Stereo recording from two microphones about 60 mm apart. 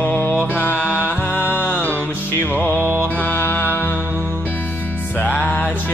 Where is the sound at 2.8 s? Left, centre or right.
Right.